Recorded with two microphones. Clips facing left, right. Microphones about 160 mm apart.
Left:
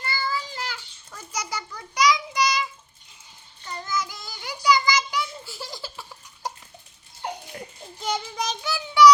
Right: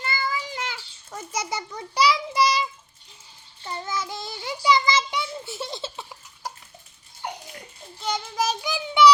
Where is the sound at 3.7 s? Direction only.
25° right (ahead or behind).